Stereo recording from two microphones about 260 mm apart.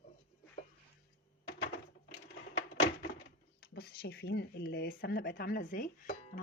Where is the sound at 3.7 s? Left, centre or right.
Left.